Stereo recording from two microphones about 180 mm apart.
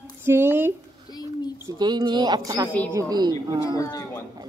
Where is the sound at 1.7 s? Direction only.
25° right (ahead or behind).